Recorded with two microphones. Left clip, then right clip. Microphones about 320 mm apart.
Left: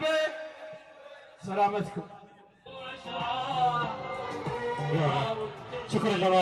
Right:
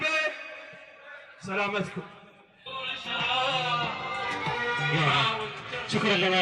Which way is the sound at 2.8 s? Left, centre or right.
Left.